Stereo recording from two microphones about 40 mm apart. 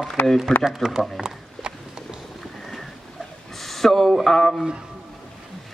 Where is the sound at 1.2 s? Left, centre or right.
Centre.